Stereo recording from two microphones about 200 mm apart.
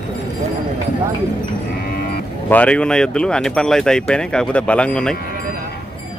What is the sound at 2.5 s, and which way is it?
Speech, 5° left (ahead or behind).